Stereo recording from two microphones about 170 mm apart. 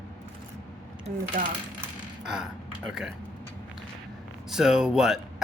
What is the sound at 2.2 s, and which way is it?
Speech, 5° right (ahead or behind).